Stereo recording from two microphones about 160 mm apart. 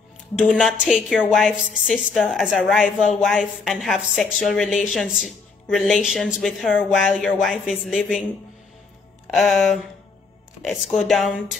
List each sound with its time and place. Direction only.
0.5 s a woman's voice: centre (ahead or behind)
9.3 s a woman's voice: centre (ahead or behind)